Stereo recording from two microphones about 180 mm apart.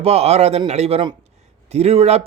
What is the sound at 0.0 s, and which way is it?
Speech, 35° right (ahead or behind).